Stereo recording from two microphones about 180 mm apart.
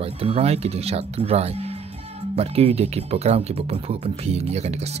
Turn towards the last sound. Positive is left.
turn(degrees=-35)  # may be behind; listen again after turning